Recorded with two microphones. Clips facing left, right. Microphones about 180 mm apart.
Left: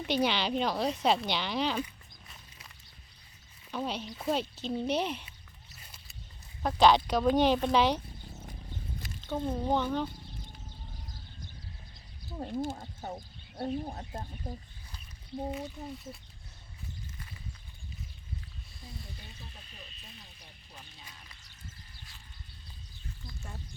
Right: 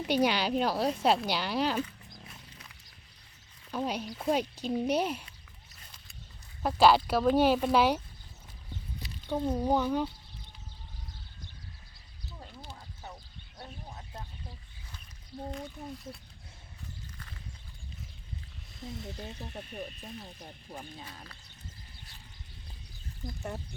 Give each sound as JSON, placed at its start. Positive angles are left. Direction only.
{"t": 0.1, "sound": "speech", "side_deg": -10}
{"t": 3.7, "sound": "speech", "side_deg": -10}
{"t": 6.6, "sound": "speech", "side_deg": -5}
{"t": 9.2, "sound": "speech", "side_deg": -15}
{"t": 12.4, "sound": "speech", "side_deg": 45}
{"t": 15.5, "sound": "speech", "side_deg": 5}
{"t": 18.8, "sound": "speech", "side_deg": -20}
{"t": 19.4, "sound": "speech", "side_deg": -60}
{"t": 23.2, "sound": "speech", "side_deg": -45}